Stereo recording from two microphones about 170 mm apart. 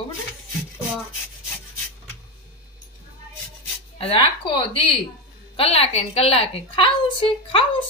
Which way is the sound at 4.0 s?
30° left (ahead or behind).